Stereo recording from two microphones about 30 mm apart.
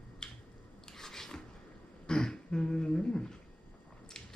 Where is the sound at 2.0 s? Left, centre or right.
Left.